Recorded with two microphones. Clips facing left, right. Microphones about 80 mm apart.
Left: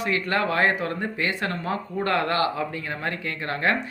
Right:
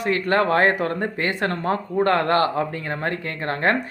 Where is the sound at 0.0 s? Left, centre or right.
Right.